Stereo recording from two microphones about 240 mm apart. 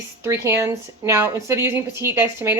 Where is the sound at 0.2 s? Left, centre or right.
Centre.